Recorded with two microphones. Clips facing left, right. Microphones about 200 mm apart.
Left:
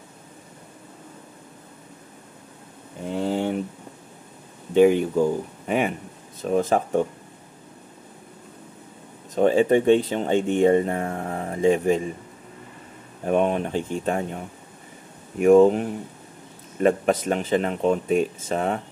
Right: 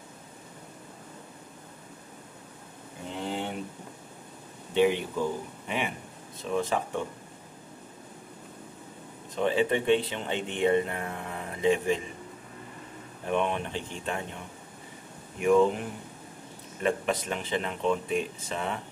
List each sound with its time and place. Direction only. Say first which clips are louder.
4.7 s speech: left 8 dB; 45° left (ahead or behind)
9.3 s speech: left 8 dB; 45° left (ahead or behind)
13.2 s speech: left 7 dB; 45° left (ahead or behind)
16.8 s speech: left 8 dB; 45° left (ahead or behind)